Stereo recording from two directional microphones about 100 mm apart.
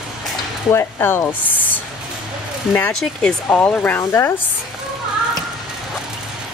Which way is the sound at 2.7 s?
10° left (ahead or behind).